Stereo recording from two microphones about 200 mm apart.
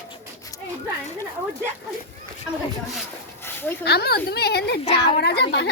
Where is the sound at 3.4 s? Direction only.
10° left (ahead or behind).